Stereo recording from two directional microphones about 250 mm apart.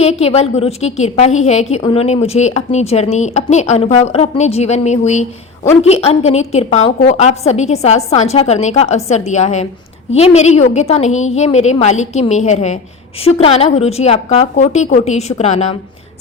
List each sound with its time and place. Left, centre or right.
0.0 s a woman's voice: left